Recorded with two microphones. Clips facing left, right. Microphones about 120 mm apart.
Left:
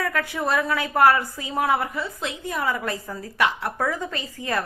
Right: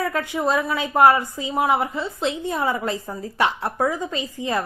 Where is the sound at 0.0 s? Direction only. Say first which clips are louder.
Right 3 dB; 25° right (ahead or behind).